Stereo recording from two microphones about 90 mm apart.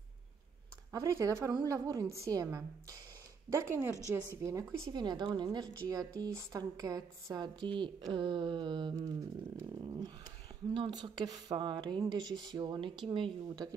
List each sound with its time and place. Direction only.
0.9 s a woman's voice: 40° right (ahead or behind)
1.5 s a woman's voice: 45° right (ahead or behind)
4.9 s speech: 55° right (ahead or behind)
5.9 s speech: 40° right (ahead or behind); by 8.9 s 60° right (ahead or behind)
8.9 s a woman's voice: 40° right (ahead or behind)
9.8 s speech: 55° right (ahead or behind)